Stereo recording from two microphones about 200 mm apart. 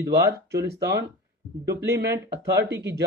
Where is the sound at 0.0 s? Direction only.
50° right (ahead or behind).